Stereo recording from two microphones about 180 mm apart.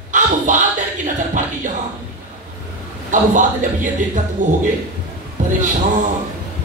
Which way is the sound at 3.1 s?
45° right (ahead or behind).